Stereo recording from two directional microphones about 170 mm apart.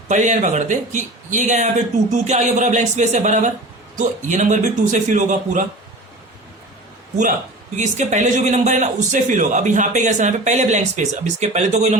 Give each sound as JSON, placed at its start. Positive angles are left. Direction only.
{"t": 0.1, "sound": "a man's voice", "side_deg": -45}
{"t": 7.8, "sound": "a man's voice", "side_deg": -45}